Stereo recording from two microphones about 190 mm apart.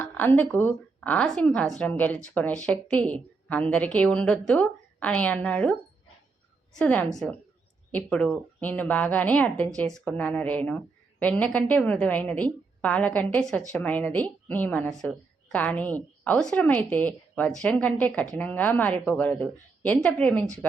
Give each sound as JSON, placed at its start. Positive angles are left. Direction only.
{"t": 0.0, "sound": "a woman's voice", "side_deg": 10}
{"t": 6.7, "sound": "a woman's voice", "side_deg": 10}